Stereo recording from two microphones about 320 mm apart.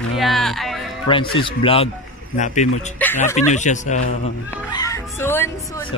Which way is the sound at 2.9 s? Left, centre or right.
Centre.